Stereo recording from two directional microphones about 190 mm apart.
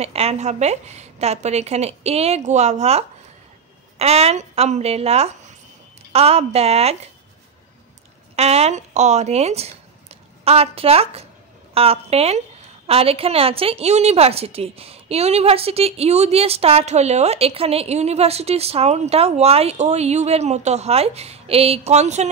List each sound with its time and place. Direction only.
0.0 s a woman's voice: 35° right (ahead or behind)
8.4 s a woman's voice: 35° right (ahead or behind)